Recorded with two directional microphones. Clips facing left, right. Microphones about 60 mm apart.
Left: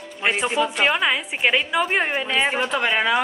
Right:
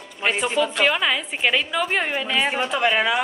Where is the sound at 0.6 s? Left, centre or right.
Left.